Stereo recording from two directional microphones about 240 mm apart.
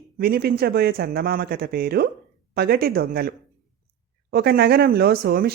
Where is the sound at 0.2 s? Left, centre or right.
Right.